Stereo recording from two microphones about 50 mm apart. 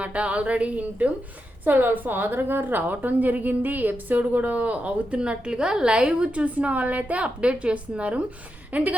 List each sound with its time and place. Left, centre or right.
0.0 s speech: right
1.6 s a woman's voice: right